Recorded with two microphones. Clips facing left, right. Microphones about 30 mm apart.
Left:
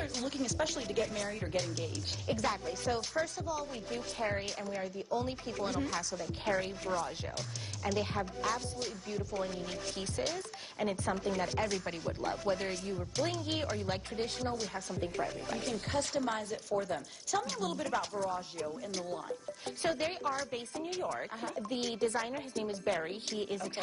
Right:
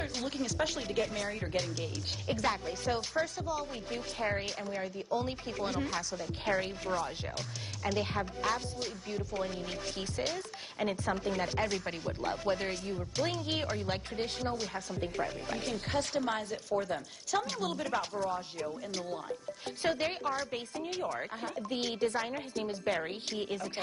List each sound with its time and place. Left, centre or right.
0.0 s speech: centre